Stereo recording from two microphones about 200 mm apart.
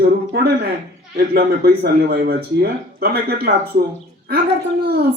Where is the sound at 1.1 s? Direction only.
50° right (ahead or behind).